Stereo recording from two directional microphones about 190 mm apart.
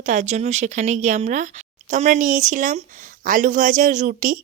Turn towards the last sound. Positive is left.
turn(degrees=-45)  # may be behind; listen again after turning